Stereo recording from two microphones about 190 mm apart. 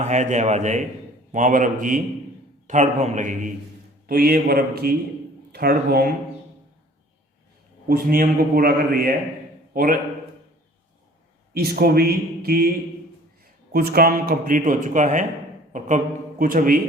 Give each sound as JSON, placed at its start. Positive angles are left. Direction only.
{"t": 0.0, "sound": "a man's voice", "side_deg": -40}
{"t": 4.0, "sound": "a man's voice", "side_deg": -50}
{"t": 7.9, "sound": "a man's voice", "side_deg": -50}
{"t": 11.5, "sound": "a man's voice", "side_deg": -55}
{"t": 13.7, "sound": "a man's voice", "side_deg": -50}
{"t": 16.4, "sound": "a man's voice", "side_deg": -45}